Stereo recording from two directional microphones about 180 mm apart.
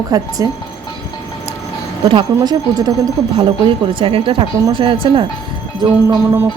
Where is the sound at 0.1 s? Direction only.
20° right (ahead or behind).